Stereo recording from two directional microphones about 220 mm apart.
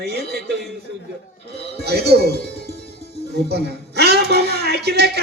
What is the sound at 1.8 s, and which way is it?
A man's voice, 45° right (ahead or behind).